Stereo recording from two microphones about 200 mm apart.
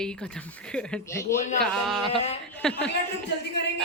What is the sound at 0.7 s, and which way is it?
Speech, 5° left (ahead or behind).